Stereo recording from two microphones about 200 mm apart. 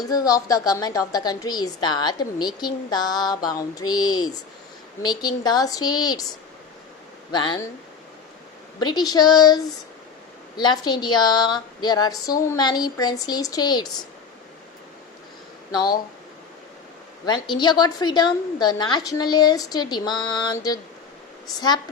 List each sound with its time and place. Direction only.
0.0 s a woman's voice: 20° left (ahead or behind)
7.3 s a woman's voice: 20° left (ahead or behind)
8.8 s a woman's voice: 20° left (ahead or behind)
15.7 s a woman's voice: 20° left (ahead or behind)
17.5 s a woman's voice: 20° left (ahead or behind)